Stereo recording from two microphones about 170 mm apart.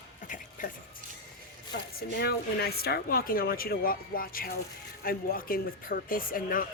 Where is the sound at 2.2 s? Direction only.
70° left (ahead or behind).